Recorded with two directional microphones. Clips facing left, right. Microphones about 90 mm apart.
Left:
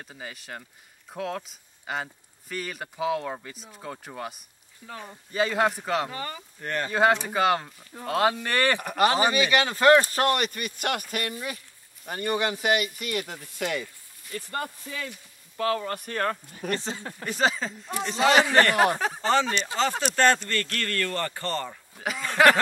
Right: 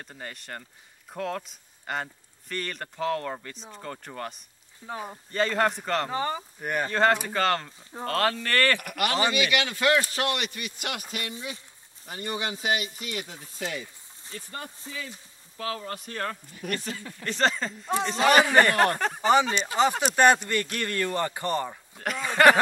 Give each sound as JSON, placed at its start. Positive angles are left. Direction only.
{"t": 0.0, "sound": "speech", "side_deg": 0}
{"t": 4.8, "sound": "speech", "side_deg": -25}
{"t": 5.3, "sound": "speech", "side_deg": 5}
{"t": 6.0, "sound": "speech", "side_deg": -30}
{"t": 6.6, "sound": "speech", "side_deg": -10}
{"t": 6.9, "sound": "speech", "side_deg": 10}
{"t": 14.9, "sound": "speech", "side_deg": 85}
{"t": 16.6, "sound": "speech", "side_deg": 25}
{"t": 17.2, "sound": "speech", "side_deg": 5}
{"t": 18.3, "sound": "speech", "side_deg": -10}
{"t": 18.8, "sound": "speech", "side_deg": 5}
{"t": 19.5, "sound": "speech", "side_deg": -20}
{"t": 21.9, "sound": "speech", "side_deg": 5}